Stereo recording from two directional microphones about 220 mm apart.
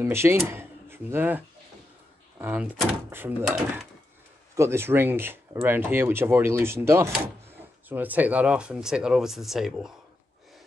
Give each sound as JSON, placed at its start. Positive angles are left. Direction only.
{"t": 0.0, "sound": "speech", "side_deg": -10}
{"t": 0.5, "sound": "drawer open or close", "side_deg": -10}
{"t": 2.3, "sound": "speech", "side_deg": -10}